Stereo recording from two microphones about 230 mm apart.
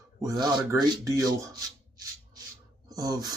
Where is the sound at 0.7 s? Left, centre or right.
Centre.